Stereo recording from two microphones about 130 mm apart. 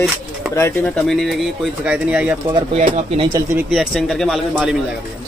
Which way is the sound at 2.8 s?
70° right (ahead or behind).